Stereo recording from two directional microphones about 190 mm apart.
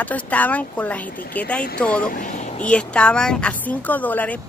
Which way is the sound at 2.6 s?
5° left (ahead or behind).